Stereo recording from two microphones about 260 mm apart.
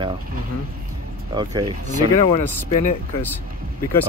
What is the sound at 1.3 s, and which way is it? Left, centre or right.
Speech, centre.